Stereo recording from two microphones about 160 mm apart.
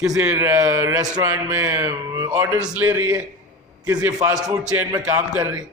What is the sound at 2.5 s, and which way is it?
Speech, 10° right (ahead or behind).